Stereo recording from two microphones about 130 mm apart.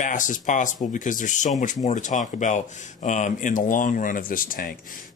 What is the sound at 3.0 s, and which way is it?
Speech, 70° left (ahead or behind).